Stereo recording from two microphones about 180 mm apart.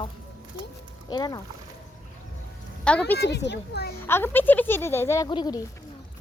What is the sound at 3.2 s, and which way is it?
Speech, 70° left (ahead or behind).